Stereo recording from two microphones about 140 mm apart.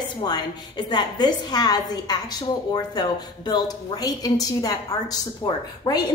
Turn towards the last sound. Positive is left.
turn(degrees=30)  # may be behind; listen again after turning